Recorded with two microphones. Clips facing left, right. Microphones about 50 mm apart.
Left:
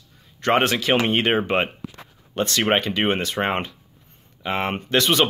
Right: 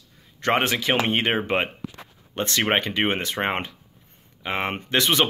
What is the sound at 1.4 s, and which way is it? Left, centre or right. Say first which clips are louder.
Speech: left 2 dB; left.